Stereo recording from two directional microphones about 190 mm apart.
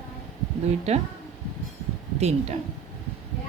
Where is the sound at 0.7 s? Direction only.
35° right (ahead or behind).